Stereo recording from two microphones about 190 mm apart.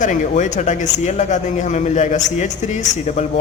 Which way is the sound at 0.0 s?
40° left (ahead or behind).